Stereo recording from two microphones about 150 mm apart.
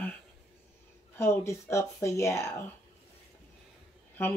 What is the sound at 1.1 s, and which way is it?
Speech, 15° left (ahead or behind).